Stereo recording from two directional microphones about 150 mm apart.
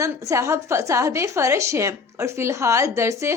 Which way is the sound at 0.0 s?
20° right (ahead or behind).